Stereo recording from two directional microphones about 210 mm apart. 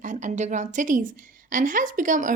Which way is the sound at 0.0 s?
35° right (ahead or behind).